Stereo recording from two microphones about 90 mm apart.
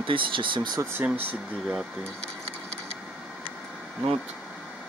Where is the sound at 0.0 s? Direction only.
70° right (ahead or behind).